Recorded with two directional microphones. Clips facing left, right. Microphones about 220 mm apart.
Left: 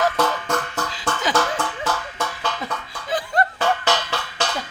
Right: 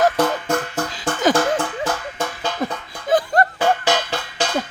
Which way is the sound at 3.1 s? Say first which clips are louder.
Right 6 dB; 45° right (ahead or behind).